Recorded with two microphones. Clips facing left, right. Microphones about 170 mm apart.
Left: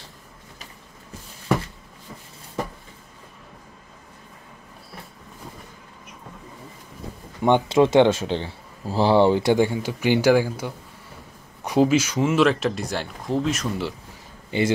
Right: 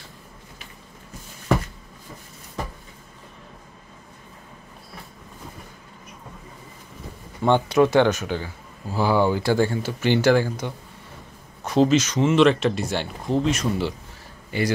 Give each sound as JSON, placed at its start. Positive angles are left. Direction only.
{"t": 7.4, "sound": "speech", "side_deg": 20}